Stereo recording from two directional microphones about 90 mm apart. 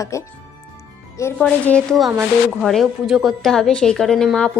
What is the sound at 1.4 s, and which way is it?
Speech, 10° left (ahead or behind).